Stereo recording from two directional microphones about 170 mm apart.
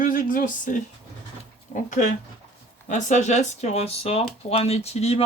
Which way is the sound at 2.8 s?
45° left (ahead or behind).